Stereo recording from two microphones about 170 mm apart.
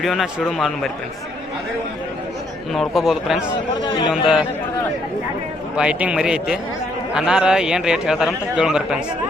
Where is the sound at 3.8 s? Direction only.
25° left (ahead or behind).